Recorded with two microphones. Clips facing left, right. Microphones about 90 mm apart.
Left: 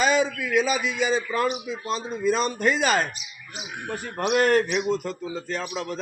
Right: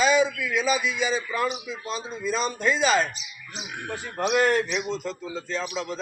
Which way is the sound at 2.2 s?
55° left (ahead or behind).